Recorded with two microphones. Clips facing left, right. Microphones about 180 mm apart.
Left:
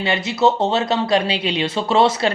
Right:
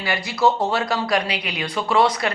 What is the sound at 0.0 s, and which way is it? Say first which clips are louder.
Speech: left 3 dB; 25° left (ahead or behind).